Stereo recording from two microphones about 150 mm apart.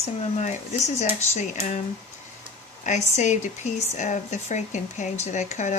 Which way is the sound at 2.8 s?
50° left (ahead or behind).